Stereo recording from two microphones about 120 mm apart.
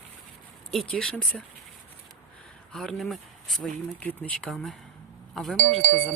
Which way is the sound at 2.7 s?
5° left (ahead or behind).